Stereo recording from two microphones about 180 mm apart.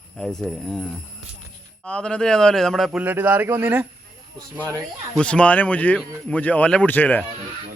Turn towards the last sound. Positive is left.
turn(degrees=10)  # may be behind; listen again after turning